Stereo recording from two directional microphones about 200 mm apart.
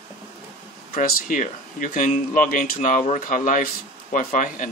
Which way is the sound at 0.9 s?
40° left (ahead or behind).